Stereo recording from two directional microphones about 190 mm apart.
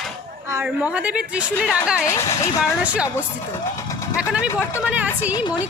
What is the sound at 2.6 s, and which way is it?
Speech, 5° right (ahead or behind).